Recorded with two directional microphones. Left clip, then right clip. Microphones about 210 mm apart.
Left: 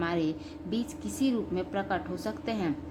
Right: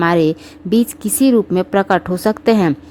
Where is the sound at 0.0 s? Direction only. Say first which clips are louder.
Right 16 dB; 50° right (ahead or behind).